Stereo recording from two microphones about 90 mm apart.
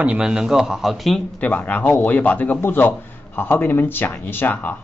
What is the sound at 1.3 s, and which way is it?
A man's voice, 15° left (ahead or behind).